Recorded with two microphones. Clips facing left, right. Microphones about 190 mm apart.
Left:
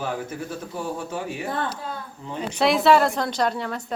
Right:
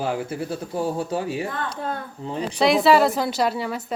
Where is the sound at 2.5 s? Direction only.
Centre (ahead or behind).